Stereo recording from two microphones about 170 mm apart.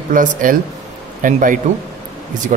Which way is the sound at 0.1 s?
55° right (ahead or behind).